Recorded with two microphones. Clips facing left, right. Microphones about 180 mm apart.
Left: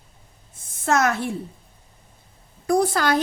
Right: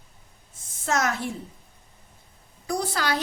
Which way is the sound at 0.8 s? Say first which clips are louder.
Left 5 dB; 55° left (ahead or behind).